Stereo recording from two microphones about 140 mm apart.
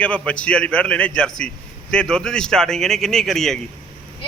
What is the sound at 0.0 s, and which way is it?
A man's voice, 10° left (ahead or behind).